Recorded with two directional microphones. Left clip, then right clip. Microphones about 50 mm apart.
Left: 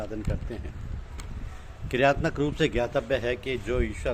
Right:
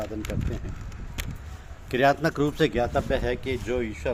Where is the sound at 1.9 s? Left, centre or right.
Left.